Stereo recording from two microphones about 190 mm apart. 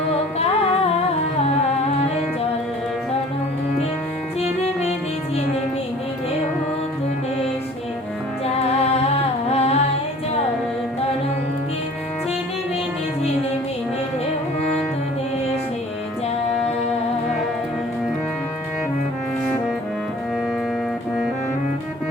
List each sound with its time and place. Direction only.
0.1 s music: 30° left (ahead or behind)
4.4 s music: 35° left (ahead or behind)
8.8 s music: 35° left (ahead or behind)